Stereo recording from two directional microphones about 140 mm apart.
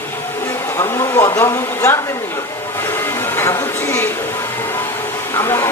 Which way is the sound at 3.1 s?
15° left (ahead or behind).